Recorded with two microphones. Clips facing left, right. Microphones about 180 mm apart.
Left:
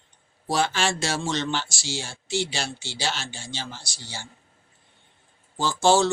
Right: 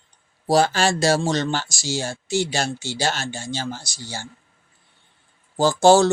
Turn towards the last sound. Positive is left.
turn(degrees=-40)  # may be behind; listen again after turning